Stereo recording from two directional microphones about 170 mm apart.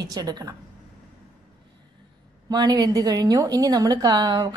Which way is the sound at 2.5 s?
25° right (ahead or behind).